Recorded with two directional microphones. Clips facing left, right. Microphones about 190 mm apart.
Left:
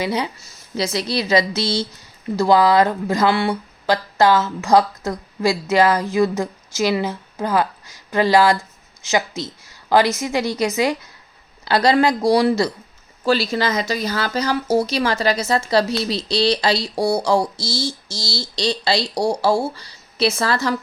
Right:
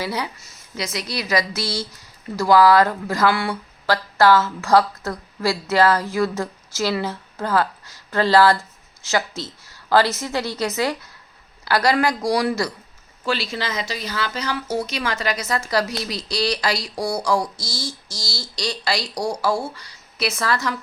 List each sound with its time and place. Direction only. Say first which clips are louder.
0.0 s speech: left 4 dB; 20° left (ahead or behind)
13.2 s speech: left 6 dB; 40° left (ahead or behind)